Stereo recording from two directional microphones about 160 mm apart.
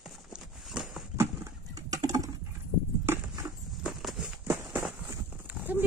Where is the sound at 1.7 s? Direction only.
25° right (ahead or behind).